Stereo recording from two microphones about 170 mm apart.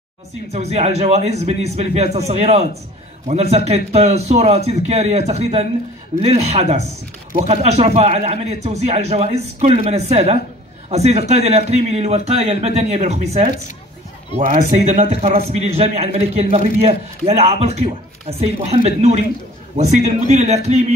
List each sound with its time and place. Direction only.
0.5 s a man's voice: 40° right (ahead or behind)